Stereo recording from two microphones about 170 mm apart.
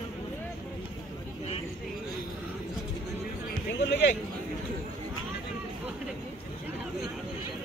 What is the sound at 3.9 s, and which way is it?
Speech, 90° left.